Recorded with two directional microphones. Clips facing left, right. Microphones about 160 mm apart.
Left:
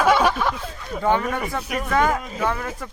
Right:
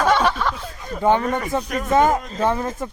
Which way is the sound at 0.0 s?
10° left (ahead or behind).